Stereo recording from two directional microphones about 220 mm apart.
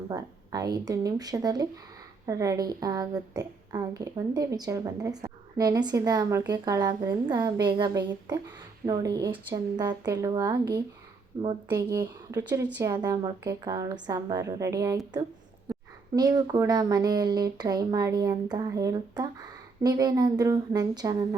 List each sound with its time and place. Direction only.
0.1 s a woman's voice: 15° right (ahead or behind)